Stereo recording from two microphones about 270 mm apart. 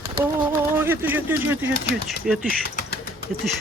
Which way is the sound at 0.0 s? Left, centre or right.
Centre.